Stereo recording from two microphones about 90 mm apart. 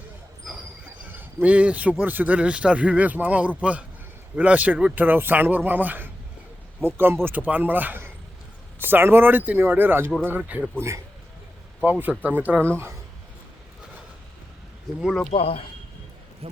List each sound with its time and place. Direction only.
1.1 s a man's voice: 20° right (ahead or behind)
11.8 s a man's voice: 20° right (ahead or behind)
14.9 s speech: centre (ahead or behind)
15.3 s speech: 90° left
16.4 s speech: 90° right